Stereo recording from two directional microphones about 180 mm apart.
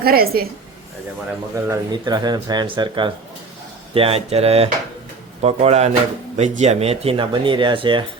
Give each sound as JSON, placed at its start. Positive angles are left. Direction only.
{"t": 0.0, "sound": "a woman's voice", "side_deg": -55}
{"t": 1.6, "sound": "speech", "side_deg": -20}